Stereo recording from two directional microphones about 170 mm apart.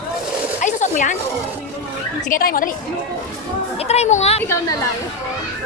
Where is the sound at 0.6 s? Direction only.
45° left (ahead or behind).